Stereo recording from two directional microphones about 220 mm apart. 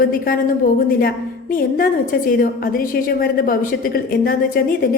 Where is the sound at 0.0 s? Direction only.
40° left (ahead or behind).